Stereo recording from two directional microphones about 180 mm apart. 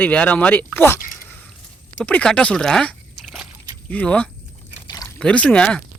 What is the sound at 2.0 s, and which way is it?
Speech, 5° left (ahead or behind).